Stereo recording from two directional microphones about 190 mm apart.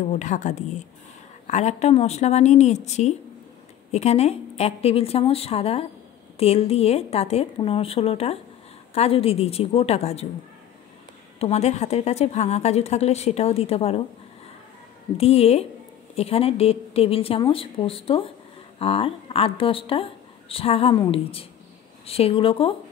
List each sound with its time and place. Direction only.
0.0 s a woman's voice: 40° left (ahead or behind)
11.3 s a woman's voice: 35° left (ahead or behind)
15.1 s a woman's voice: 35° left (ahead or behind)